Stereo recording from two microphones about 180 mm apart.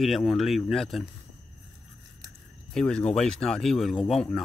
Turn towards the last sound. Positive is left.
turn(degrees=0)  # may be behind; listen again after turning